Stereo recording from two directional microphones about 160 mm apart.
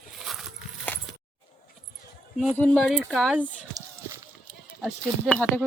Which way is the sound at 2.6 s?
5° left (ahead or behind).